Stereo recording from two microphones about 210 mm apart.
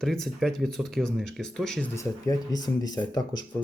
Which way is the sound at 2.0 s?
15° left (ahead or behind).